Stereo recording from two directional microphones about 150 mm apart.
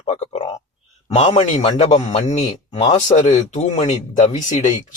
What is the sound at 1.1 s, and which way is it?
Speech, 45° left (ahead or behind).